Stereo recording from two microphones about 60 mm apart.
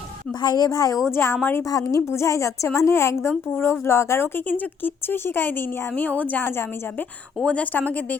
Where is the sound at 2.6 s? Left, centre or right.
Left.